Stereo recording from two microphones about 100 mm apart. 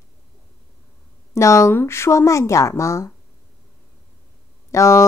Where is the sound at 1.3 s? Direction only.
30° left (ahead or behind).